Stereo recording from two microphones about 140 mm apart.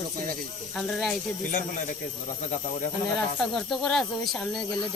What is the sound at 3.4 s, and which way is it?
Speech, 5° left (ahead or behind).